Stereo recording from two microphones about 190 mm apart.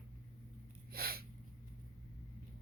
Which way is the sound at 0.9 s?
50° right (ahead or behind).